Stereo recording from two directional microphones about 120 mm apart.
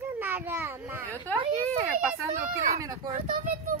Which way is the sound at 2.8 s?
30° right (ahead or behind).